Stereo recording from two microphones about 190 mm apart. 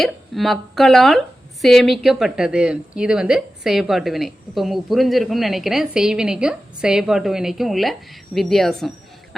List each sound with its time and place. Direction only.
0.0 s a woman's voice: centre (ahead or behind)